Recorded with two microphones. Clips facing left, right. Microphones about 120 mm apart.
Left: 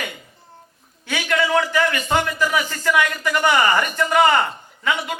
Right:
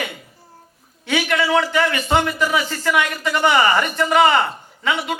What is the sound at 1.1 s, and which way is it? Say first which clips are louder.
Speech: right 2 dB; 20° right (ahead or behind).